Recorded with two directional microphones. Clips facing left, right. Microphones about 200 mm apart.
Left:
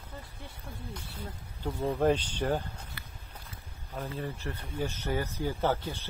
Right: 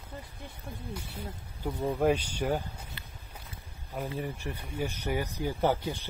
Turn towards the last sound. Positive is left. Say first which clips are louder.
# right 2 dB
turn(degrees=-15)  # may be behind; listen again after turning